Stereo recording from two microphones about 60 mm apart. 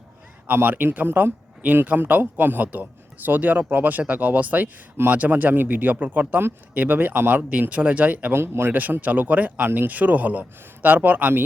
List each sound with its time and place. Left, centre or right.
0.4 s speech: right
8.3 s speech: right
8.7 s speech: right